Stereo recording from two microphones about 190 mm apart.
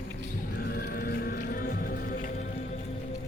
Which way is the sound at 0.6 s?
55° left (ahead or behind).